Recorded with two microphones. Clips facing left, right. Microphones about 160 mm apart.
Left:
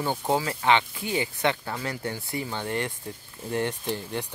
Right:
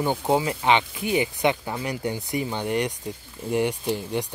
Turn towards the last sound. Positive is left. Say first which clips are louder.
# right 4 dB
turn(degrees=-15)  # may be behind; listen again after turning